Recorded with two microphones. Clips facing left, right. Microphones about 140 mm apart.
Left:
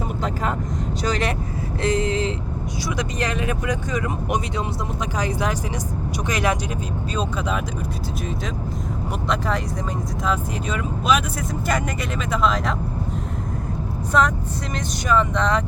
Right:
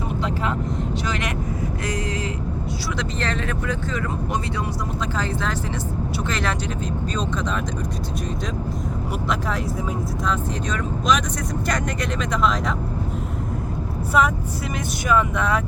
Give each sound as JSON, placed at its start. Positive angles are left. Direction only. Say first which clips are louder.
{"t": 1.0, "sound": "speech", "louder": "left 8 dB", "side_deg": 35}
{"t": 1.8, "sound": "vehicle", "louder": "left 10 dB", "side_deg": 25}
{"t": 3.0, "sound": "speech", "louder": "left 2 dB", "side_deg": 15}
{"t": 10.2, "sound": "speech", "louder": "left 2 dB", "side_deg": 5}
{"t": 12.3, "sound": "speech", "louder": "left 2 dB", "side_deg": 0}
{"t": 14.1, "sound": "speech", "louder": "even", "side_deg": -5}